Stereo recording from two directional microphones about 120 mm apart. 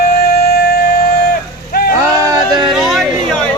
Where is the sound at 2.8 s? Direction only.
Centre (ahead or behind).